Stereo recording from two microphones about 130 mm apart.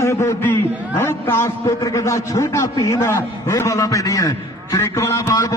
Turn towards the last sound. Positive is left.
turn(degrees=25)  # may be behind; listen again after turning